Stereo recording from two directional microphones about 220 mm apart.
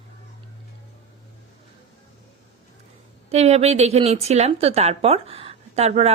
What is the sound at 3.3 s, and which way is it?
Speech, 30° right (ahead or behind).